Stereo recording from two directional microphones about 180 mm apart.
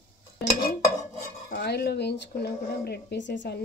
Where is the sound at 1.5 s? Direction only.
65° left (ahead or behind).